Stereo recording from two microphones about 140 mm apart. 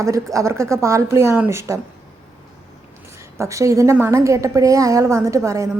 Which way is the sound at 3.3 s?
20° right (ahead or behind).